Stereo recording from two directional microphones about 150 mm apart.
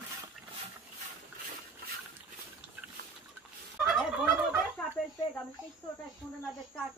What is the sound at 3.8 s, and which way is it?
Gobble, 10° right (ahead or behind).